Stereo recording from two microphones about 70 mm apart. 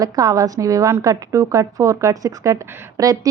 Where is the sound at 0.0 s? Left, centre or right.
Right.